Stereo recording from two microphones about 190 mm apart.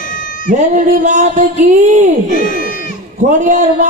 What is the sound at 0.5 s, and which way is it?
A man's voice, 40° right (ahead or behind).